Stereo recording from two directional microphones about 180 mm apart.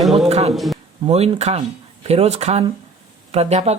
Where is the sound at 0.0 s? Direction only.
Centre (ahead or behind).